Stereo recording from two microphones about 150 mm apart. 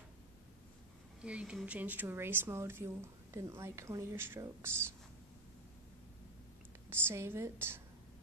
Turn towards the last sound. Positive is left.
turn(degrees=-15)  # may be behind; listen again after turning